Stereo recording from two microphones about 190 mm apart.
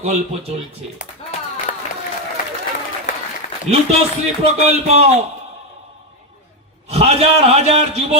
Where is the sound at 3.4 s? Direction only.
40° left (ahead or behind).